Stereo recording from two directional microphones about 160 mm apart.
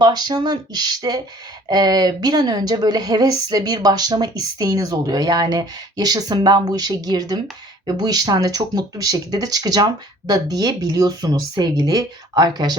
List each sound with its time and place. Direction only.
0.0 s a woman's voice: 25° right (ahead or behind)